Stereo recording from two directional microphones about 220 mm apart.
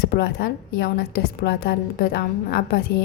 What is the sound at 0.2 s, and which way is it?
A woman's voice, 50° left (ahead or behind).